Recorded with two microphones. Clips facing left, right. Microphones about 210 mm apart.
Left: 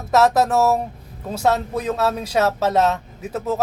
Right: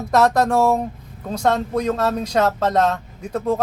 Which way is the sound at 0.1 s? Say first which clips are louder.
Even; 5° left (ahead or behind).